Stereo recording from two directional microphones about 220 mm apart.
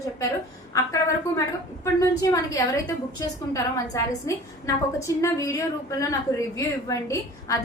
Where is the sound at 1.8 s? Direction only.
15° left (ahead or behind).